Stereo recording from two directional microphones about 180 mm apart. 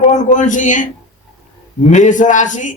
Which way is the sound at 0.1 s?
45° left (ahead or behind).